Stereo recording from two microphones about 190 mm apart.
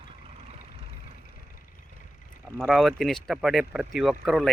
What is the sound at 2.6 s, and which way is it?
Speech, centre (ahead or behind).